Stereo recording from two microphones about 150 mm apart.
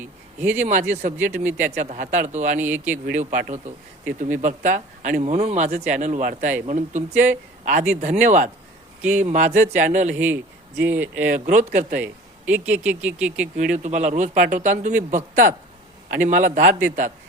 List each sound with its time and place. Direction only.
0.0 s speech: 10° right (ahead or behind)
0.6 s speech: 55° right (ahead or behind)
2.6 s speech: 10° right (ahead or behind)
3.1 s speech: 60° right (ahead or behind)
10.8 s speech: 10° right (ahead or behind)
11.4 s speech: 55° right (ahead or behind)
11.9 s speech: 10° right (ahead or behind)
13.6 s speech: 55° right (ahead or behind)